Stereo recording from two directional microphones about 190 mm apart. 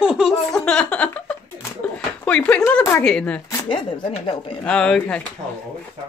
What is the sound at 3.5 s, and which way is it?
Speech, 25° left (ahead or behind).